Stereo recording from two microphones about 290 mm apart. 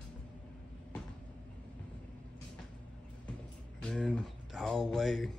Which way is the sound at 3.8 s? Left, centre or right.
Centre.